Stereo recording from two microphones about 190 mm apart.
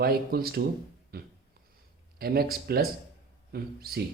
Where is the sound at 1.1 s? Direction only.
55° right (ahead or behind).